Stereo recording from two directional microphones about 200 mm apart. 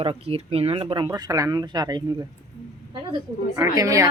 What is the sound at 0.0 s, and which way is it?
Speech, 30° right (ahead or behind).